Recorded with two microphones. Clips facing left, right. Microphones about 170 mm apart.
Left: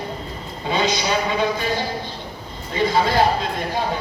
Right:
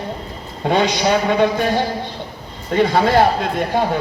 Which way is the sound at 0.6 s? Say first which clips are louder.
Right 5 dB; 70° right (ahead or behind).